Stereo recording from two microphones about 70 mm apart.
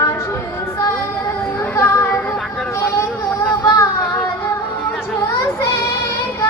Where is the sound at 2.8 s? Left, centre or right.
Left.